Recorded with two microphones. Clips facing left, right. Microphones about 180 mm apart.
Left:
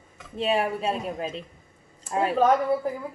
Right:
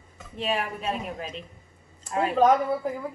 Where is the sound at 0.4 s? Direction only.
30° left (ahead or behind).